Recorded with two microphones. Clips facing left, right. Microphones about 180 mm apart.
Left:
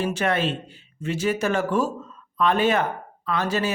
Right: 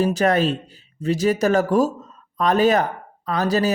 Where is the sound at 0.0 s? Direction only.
40° right (ahead or behind).